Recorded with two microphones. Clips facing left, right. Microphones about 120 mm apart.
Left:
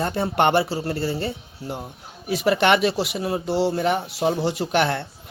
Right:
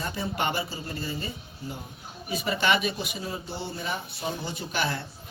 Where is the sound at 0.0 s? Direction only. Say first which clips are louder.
Left 9 dB; 65° left (ahead or behind).